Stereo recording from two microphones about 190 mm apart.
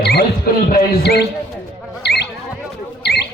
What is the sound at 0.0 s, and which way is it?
Music, 55° left (ahead or behind).